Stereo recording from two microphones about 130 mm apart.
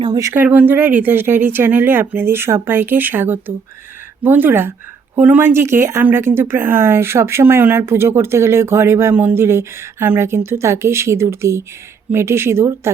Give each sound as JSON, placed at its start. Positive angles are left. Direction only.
{"t": 0.0, "sound": "speech", "side_deg": -30}
{"t": 0.4, "sound": "speech", "side_deg": -15}